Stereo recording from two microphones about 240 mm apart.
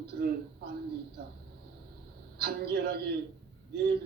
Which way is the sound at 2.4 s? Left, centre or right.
Right.